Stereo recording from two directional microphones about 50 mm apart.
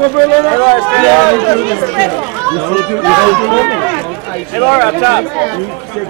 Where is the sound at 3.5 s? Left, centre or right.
Centre.